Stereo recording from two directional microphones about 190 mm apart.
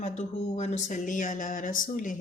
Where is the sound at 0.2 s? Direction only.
35° left (ahead or behind).